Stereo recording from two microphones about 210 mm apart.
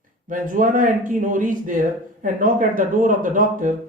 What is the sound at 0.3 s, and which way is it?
Speech, 40° right (ahead or behind).